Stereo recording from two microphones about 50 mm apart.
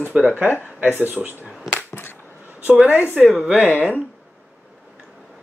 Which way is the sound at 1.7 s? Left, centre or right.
Left.